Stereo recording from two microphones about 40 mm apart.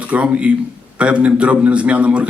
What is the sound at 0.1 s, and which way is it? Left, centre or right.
Speech, right.